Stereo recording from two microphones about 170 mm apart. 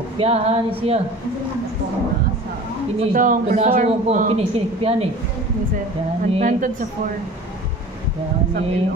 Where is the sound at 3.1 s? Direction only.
55° right (ahead or behind).